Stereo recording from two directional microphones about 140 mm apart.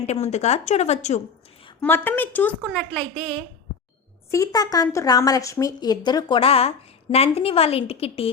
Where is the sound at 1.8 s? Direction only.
15° left (ahead or behind).